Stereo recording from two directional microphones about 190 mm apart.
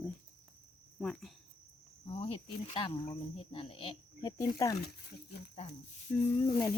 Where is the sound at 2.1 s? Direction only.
30° left (ahead or behind).